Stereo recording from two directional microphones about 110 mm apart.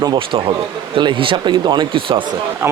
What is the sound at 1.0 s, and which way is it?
Speech, 50° right (ahead or behind).